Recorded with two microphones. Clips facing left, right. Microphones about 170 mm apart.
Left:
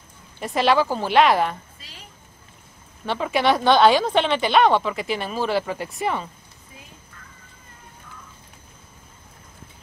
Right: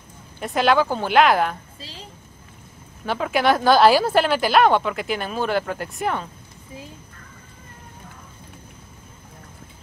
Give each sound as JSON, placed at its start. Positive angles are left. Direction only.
{"t": 0.4, "sound": "a woman's voice", "side_deg": 0}
{"t": 1.8, "sound": "a woman's voice", "side_deg": -30}
{"t": 3.1, "sound": "a woman's voice", "side_deg": 0}